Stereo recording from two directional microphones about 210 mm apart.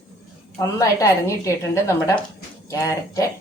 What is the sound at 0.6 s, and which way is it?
A woman's voice, 15° left (ahead or behind).